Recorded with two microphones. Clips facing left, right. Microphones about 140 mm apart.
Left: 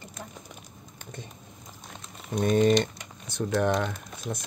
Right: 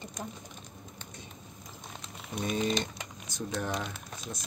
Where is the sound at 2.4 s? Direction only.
60° left (ahead or behind).